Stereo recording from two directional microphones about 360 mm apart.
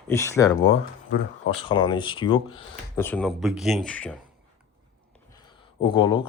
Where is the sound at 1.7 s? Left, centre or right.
Centre.